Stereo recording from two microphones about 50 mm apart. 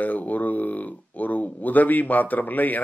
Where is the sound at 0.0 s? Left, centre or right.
Left.